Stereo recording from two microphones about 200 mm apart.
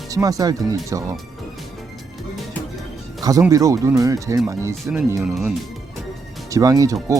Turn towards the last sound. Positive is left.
turn(degrees=-15)  # may be behind; listen again after turning